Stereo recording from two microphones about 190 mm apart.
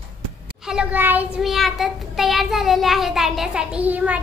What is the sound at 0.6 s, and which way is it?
A woman's voice, 5° right (ahead or behind).